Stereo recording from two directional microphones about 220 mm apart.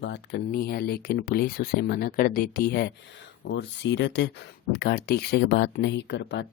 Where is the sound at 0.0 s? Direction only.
50° left (ahead or behind).